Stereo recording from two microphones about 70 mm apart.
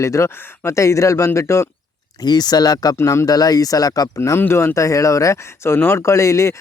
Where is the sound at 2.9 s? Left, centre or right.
Left.